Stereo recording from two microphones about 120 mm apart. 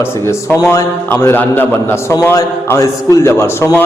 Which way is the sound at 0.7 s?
20° left (ahead or behind).